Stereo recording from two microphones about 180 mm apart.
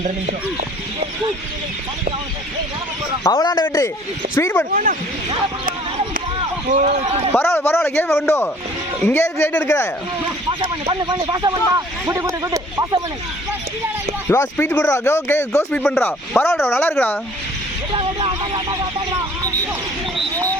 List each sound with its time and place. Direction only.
3.2 s speech: 20° left (ahead or behind)
4.7 s speech: 45° right (ahead or behind)
6.7 s speech: 40° right (ahead or behind)
7.3 s speech: 15° left (ahead or behind)
10.6 s speech: 25° right (ahead or behind)
14.3 s speech: 10° left (ahead or behind)
17.9 s speech: 30° right (ahead or behind)